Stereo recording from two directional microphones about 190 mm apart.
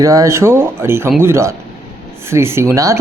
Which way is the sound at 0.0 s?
15° right (ahead or behind).